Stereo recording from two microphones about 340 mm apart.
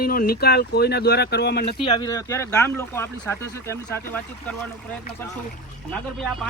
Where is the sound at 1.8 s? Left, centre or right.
Centre.